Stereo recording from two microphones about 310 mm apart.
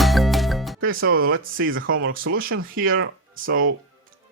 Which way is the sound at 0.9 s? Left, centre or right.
Right.